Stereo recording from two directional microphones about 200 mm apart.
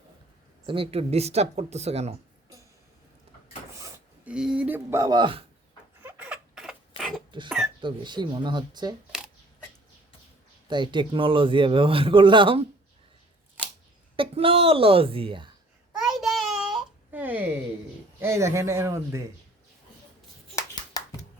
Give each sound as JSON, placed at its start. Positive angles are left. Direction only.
{"t": 0.7, "sound": "speech", "side_deg": -30}
{"t": 3.8, "sound": "speech", "side_deg": -15}
{"t": 6.0, "sound": "rodents", "side_deg": -10}
{"t": 7.3, "sound": "throat clearing", "side_deg": -25}
{"t": 7.8, "sound": "a man's voice", "side_deg": -25}
{"t": 10.7, "sound": "a man's voice", "side_deg": -25}
{"t": 14.2, "sound": "a man's voice", "side_deg": -30}
{"t": 16.0, "sound": "a sound", "side_deg": 0}
{"t": 18.2, "sound": "speech", "side_deg": -15}
{"t": 20.9, "sound": "a sound", "side_deg": 20}